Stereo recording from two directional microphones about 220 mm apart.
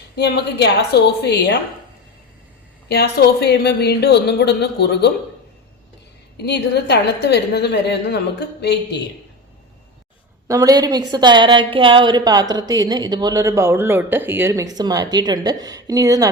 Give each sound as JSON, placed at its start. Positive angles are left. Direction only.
{"t": 0.2, "sound": "a woman's voice", "side_deg": 50}
{"t": 2.9, "sound": "a woman's voice", "side_deg": 45}
{"t": 6.3, "sound": "a woman's voice", "side_deg": 50}
{"t": 10.5, "sound": "a woman's voice", "side_deg": -15}